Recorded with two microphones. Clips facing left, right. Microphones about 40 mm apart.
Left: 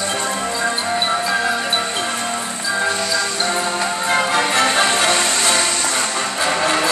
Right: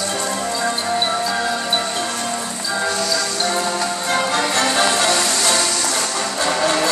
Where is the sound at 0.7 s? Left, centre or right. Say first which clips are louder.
Left 1 dB; centre.